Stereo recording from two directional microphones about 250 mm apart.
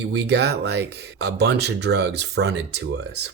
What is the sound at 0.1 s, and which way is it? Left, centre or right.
Speech, right.